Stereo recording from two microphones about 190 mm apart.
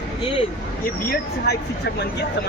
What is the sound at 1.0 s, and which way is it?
Speech, 60° left (ahead or behind).